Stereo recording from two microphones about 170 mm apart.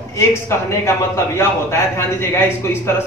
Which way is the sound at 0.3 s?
15° left (ahead or behind).